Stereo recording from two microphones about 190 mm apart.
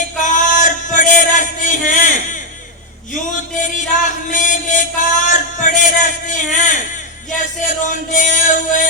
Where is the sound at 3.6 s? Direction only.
40° left (ahead or behind).